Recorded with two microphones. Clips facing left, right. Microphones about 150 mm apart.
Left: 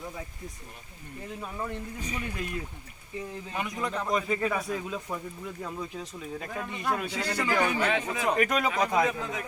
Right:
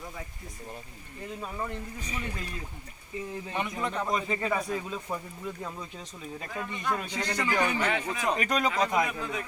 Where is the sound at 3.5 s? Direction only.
Centre (ahead or behind).